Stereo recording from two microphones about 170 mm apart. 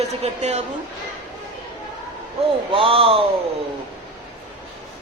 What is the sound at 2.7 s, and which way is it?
Speech, 30° right (ahead or behind).